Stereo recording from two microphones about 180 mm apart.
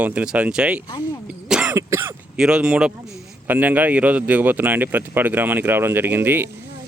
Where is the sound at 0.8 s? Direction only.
25° left (ahead or behind).